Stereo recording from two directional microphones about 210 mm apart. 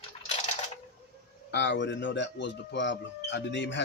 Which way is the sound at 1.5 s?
60° left (ahead or behind).